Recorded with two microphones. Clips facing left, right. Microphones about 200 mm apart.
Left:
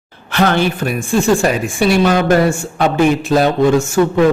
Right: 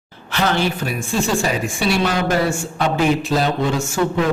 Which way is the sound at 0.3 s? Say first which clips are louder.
Left 5 dB; 55° left (ahead or behind).